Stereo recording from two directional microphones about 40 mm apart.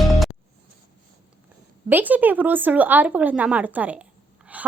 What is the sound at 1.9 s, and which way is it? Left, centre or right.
A woman's voice, right.